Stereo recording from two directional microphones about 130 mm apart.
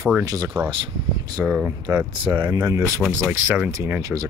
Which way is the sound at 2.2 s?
40° right (ahead or behind).